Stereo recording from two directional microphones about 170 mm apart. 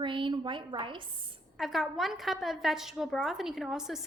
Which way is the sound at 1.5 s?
Centre (ahead or behind).